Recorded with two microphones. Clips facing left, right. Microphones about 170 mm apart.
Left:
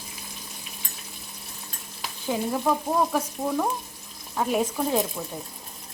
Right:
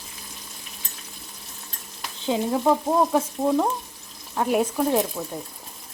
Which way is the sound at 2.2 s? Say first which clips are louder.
Right 4 dB; 20° right (ahead or behind).